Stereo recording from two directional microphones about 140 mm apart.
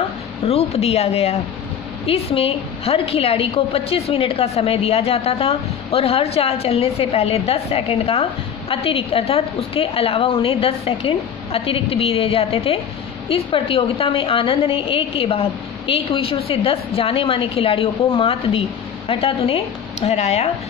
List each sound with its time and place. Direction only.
0.5 s a woman's voice: 45° left (ahead or behind)